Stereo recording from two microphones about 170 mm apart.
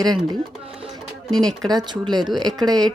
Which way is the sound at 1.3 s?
25° right (ahead or behind).